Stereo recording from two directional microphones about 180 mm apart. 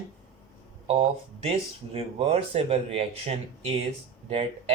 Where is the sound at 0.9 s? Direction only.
35° right (ahead or behind).